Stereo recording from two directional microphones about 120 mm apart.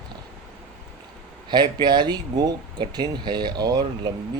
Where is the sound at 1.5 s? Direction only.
40° right (ahead or behind).